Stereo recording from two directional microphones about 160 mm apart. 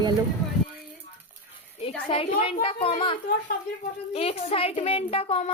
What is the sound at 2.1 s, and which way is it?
Speech, 35° left (ahead or behind).